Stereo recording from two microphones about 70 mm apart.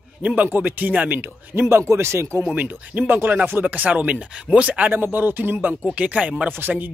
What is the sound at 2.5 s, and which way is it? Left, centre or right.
Speech, right.